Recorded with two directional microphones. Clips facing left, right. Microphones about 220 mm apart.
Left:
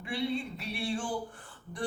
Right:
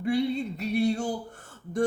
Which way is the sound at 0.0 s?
40° right (ahead or behind).